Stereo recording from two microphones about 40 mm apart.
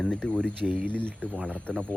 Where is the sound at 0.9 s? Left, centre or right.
Left.